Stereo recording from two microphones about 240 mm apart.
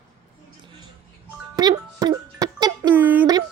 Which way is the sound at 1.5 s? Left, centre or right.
Centre.